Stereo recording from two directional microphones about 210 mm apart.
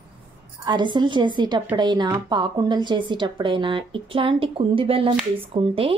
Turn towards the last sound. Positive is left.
turn(degrees=-25)  # may be behind; listen again after turning